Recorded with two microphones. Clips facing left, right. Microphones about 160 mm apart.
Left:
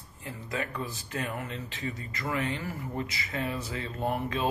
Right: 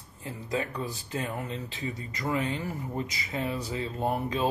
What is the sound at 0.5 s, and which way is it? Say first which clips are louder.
Speech: right 3 dB; 20° right (ahead or behind).